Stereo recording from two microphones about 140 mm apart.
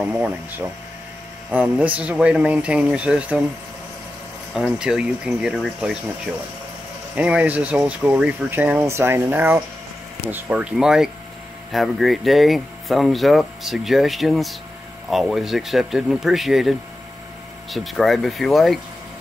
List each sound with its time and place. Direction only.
0.0 s speech: 10° right (ahead or behind)
4.6 s speech: 5° right (ahead or behind)
7.2 s speech: 10° right (ahead or behind)